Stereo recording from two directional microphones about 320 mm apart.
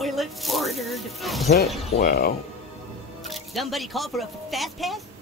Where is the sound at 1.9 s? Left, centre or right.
Left.